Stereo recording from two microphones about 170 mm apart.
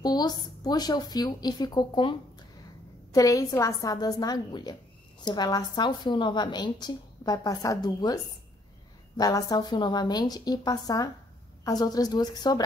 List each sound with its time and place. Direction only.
0.0 s a woman's voice: 25° left (ahead or behind)